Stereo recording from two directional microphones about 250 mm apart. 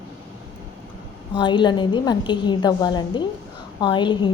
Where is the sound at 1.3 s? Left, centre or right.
Centre.